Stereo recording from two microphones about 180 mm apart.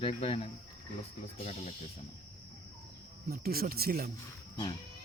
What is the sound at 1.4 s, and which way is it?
Speech, 40° left (ahead or behind).